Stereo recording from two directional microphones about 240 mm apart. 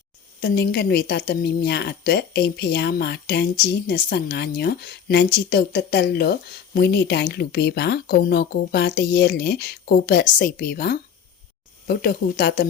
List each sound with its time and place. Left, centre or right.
0.3 s a woman's voice: left